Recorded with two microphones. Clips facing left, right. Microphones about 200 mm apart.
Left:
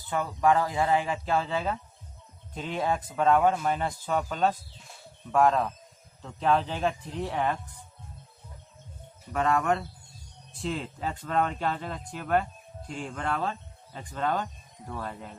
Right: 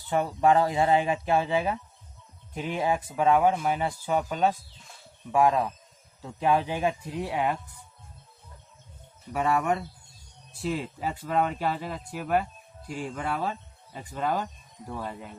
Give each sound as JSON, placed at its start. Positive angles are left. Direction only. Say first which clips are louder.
{"t": 0.1, "sound": "speech", "louder": "right 2 dB", "side_deg": -25}
{"t": 9.3, "sound": "speech", "louder": "even", "side_deg": -10}